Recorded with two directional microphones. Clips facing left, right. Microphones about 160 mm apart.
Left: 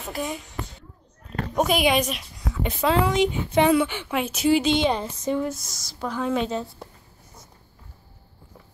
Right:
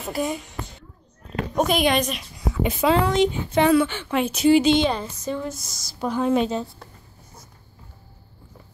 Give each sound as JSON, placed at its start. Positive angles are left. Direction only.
{"t": 0.0, "sound": "a woman's voice", "side_deg": -5}
{"t": 1.5, "sound": "a woman's voice", "side_deg": 5}
{"t": 3.1, "sound": "speech", "side_deg": 15}
{"t": 4.2, "sound": "a woman's voice", "side_deg": 5}
{"t": 4.8, "sound": "speech", "side_deg": 15}
{"t": 5.5, "sound": "a woman's voice", "side_deg": 0}
{"t": 5.9, "sound": "a woman's voice", "side_deg": -15}